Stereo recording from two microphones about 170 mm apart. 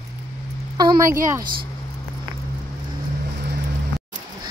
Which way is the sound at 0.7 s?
20° right (ahead or behind).